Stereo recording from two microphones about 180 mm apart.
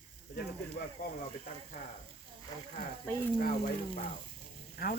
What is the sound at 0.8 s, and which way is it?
Speech, 55° left (ahead or behind).